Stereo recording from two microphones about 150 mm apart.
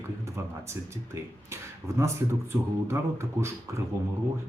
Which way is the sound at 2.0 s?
20° right (ahead or behind).